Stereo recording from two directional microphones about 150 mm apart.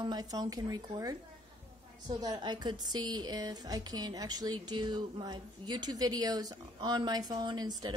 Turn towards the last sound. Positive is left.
turn(degrees=-25)  # may be behind; listen again after turning